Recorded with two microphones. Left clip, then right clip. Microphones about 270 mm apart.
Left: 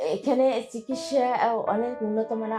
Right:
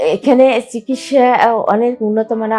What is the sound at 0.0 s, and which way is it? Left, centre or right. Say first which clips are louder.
A woman's voice: right 13 dB; right.